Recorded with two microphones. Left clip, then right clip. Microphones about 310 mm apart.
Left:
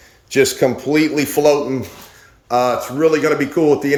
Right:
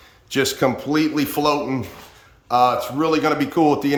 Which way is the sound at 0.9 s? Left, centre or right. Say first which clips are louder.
Left 4 dB; right.